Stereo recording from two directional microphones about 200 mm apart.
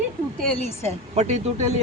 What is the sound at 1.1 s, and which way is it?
Speech, 35° right (ahead or behind).